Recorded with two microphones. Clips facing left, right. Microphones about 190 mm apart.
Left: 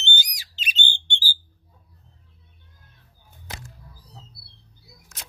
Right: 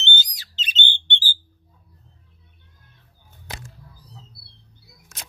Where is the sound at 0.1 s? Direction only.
10° left (ahead or behind).